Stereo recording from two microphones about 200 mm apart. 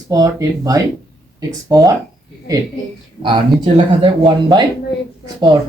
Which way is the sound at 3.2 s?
25° right (ahead or behind).